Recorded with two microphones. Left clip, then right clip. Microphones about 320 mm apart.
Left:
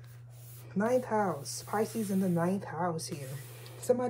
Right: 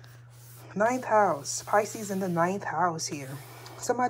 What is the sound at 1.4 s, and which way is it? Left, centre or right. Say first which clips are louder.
Speech: right 6 dB; right.